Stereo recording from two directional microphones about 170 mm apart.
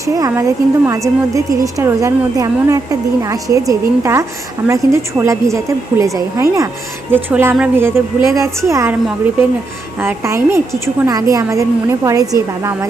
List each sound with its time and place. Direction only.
0.0 s a woman's voice: 20° right (ahead or behind)
10.0 s a woman's voice: 15° right (ahead or behind)